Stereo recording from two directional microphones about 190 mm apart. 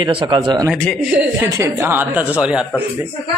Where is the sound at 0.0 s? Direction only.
25° right (ahead or behind).